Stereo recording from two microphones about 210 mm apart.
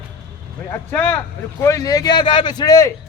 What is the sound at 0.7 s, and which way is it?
A man's voice, 10° left (ahead or behind).